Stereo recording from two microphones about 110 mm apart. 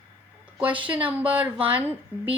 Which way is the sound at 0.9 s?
15° right (ahead or behind).